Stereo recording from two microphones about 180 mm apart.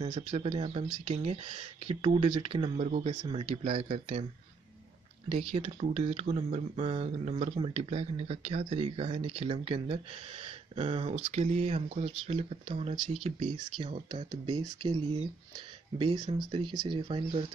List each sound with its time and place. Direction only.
0.0 s speech: 35° right (ahead or behind)
5.3 s speech: 35° right (ahead or behind)